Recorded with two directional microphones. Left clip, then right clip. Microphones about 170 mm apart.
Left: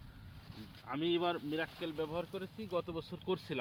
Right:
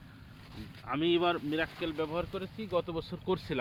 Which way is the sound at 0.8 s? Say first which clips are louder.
Right 6 dB; 25° left (ahead or behind).